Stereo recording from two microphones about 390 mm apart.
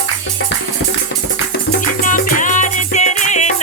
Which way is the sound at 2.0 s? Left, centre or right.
Centre.